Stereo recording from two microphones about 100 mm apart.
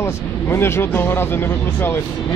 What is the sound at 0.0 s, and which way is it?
Speech, 25° left (ahead or behind).